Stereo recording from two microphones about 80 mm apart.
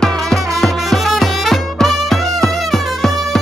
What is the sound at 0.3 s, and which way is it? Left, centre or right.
Music, centre.